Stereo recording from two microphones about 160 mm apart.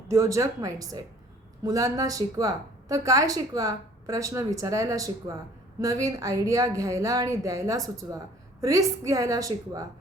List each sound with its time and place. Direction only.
0.1 s a woman's voice: 20° right (ahead or behind)